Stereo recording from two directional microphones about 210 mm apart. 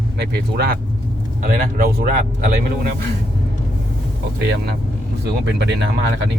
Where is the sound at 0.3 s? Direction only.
50° right (ahead or behind).